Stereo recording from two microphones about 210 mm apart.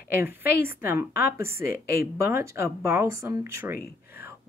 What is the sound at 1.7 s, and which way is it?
Speech, 45° left (ahead or behind).